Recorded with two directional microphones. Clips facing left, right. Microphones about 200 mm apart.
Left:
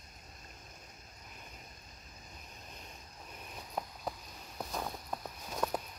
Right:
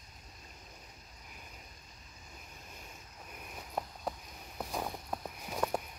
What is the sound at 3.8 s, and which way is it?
Cricket, centre (ahead or behind).